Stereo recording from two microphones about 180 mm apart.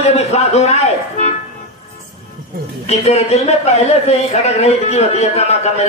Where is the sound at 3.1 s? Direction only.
35° left (ahead or behind).